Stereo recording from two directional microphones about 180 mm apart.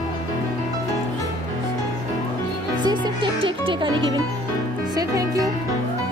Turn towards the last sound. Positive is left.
turn(degrees=-20)  # may be behind; listen again after turning